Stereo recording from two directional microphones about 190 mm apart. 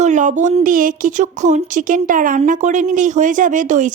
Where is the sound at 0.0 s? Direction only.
40° right (ahead or behind).